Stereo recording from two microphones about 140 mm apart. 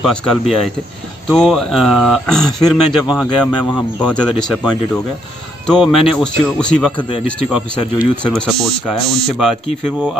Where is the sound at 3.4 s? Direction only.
10° left (ahead or behind).